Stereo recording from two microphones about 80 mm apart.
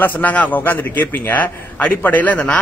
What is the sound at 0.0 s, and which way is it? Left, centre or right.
A man's voice, centre.